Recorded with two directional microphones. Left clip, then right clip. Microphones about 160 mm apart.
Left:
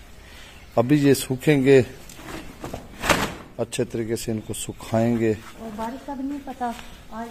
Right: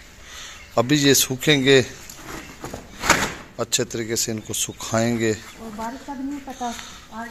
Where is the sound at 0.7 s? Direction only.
20° left (ahead or behind).